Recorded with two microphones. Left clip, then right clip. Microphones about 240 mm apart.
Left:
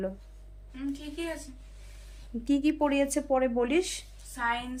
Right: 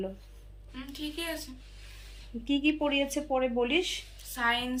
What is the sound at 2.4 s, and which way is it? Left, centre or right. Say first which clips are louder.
Speech: left 1 dB; centre.